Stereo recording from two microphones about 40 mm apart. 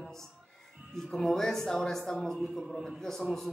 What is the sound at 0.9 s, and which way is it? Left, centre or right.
Speech, centre.